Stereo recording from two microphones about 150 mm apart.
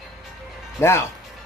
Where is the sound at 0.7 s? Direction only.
15° left (ahead or behind).